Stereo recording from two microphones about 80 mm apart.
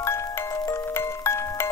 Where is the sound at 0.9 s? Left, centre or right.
Left.